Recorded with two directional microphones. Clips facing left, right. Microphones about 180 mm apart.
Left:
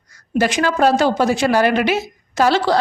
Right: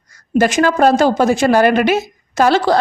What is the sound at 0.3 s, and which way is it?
A woman's voice, 45° right (ahead or behind).